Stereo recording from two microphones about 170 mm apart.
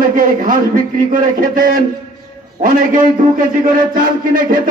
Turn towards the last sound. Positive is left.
turn(degrees=-55)  # may be behind; listen again after turning